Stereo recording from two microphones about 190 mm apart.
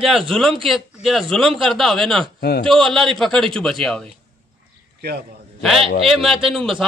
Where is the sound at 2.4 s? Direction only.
55° left (ahead or behind).